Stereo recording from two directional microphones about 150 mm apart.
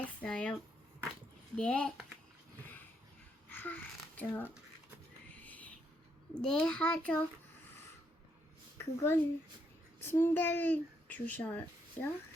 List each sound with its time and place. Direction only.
0.2 s a child's voice: 5° left (ahead or behind)
1.5 s a child's voice: 5° left (ahead or behind)
3.5 s a child's voice: 10° left (ahead or behind)
5.4 s a sound: 10° left (ahead or behind)
6.3 s a child's voice: 5° left (ahead or behind)
8.8 s a child's voice: 15° left (ahead or behind)